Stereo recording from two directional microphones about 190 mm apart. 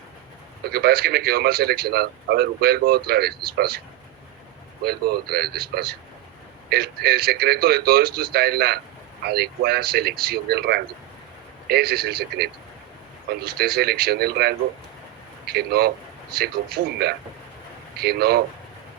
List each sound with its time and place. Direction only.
0.6 s speech: 55° right (ahead or behind)
4.8 s speech: 55° right (ahead or behind)